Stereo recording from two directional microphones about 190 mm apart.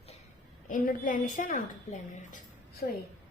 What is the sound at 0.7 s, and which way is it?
A woman's voice, 45° left (ahead or behind).